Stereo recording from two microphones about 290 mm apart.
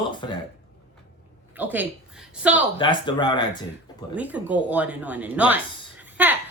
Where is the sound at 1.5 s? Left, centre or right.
Centre.